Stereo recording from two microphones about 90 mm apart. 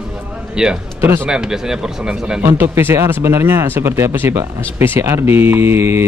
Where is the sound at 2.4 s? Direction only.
25° right (ahead or behind).